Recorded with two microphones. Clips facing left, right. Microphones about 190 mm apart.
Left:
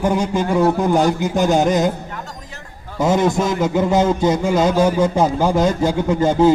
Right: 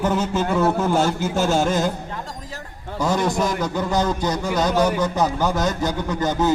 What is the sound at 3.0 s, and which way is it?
A man's voice, 20° left (ahead or behind).